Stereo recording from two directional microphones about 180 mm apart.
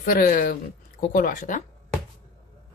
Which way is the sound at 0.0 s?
55° left (ahead or behind).